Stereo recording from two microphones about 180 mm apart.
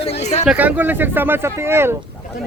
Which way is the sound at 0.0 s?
35° left (ahead or behind).